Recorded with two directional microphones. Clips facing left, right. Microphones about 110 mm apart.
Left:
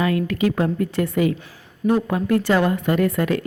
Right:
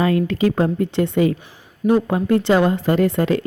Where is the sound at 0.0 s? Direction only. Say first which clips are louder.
Right 3 dB; 30° right (ahead or behind).